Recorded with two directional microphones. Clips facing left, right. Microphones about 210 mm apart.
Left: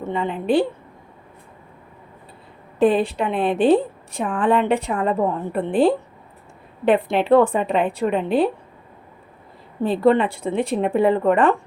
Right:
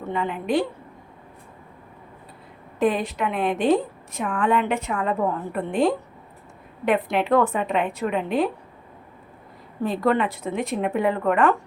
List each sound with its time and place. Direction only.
0.0 s speech: 25° left (ahead or behind)
2.7 s a woman's voice: 30° left (ahead or behind)
9.8 s speech: 30° left (ahead or behind)